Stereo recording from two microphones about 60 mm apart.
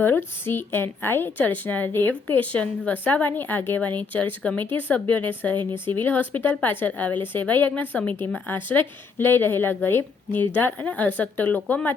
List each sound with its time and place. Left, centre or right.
0.4 s a woman's voice: left